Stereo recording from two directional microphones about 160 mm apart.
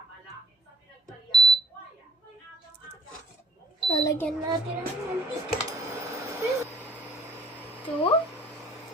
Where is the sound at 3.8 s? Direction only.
25° left (ahead or behind).